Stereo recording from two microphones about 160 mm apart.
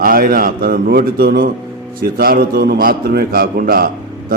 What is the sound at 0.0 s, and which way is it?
A man's voice, 65° right (ahead or behind).